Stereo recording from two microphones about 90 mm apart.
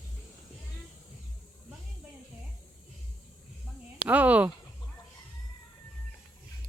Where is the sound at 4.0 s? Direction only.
20° right (ahead or behind).